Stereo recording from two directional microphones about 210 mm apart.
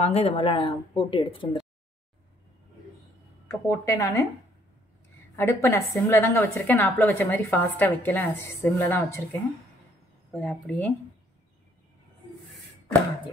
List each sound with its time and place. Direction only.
0.0 s speech: 30° left (ahead or behind)
3.4 s a woman's voice: 15° left (ahead or behind)
5.3 s a woman's voice: 15° left (ahead or behind)